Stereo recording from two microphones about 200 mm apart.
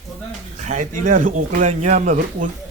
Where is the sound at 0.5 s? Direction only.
40° right (ahead or behind).